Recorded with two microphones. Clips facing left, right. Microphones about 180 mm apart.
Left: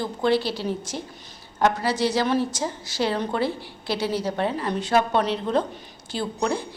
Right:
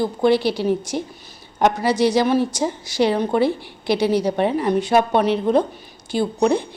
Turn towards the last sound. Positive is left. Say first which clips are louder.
# right 7 dB
turn(degrees=-15)  # may be behind; listen again after turning